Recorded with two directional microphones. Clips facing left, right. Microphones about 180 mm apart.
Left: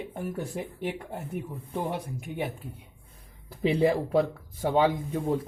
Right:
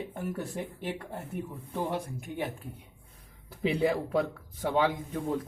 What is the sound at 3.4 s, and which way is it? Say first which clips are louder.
Speech: left 4 dB; 30° left (ahead or behind).